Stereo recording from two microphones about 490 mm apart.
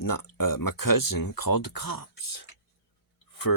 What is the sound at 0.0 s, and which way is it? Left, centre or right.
Speech, left.